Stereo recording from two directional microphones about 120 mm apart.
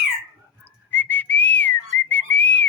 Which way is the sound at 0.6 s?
15° left (ahead or behind).